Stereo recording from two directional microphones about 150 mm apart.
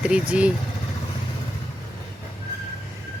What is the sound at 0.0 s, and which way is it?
Speech, 5° right (ahead or behind).